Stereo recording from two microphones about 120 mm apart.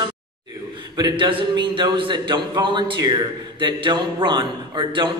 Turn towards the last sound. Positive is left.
turn(degrees=-40)  # may be behind; listen again after turning